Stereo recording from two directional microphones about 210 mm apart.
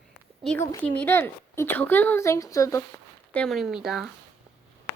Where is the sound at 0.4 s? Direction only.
10° left (ahead or behind).